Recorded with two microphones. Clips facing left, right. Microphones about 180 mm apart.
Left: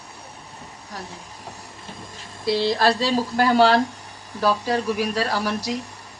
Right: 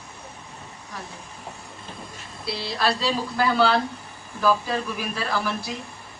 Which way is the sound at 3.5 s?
90° left.